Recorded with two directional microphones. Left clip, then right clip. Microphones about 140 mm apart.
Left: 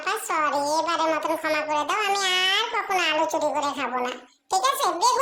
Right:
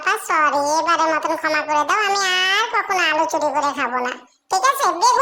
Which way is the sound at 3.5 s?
10° right (ahead or behind).